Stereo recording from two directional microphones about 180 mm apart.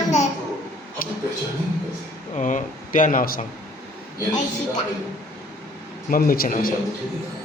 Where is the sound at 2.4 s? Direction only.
45° left (ahead or behind).